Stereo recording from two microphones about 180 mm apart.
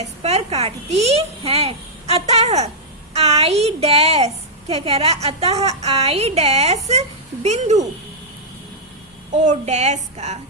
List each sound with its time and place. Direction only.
0.0 s a child's voice: 35° right (ahead or behind)
9.4 s a child's voice: 40° right (ahead or behind)